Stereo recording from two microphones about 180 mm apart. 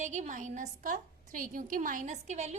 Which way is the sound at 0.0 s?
40° right (ahead or behind).